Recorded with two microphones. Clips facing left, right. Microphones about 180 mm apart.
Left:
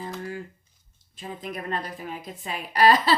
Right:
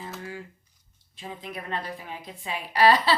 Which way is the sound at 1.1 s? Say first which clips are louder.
Left 3 dB; 45° left (ahead or behind).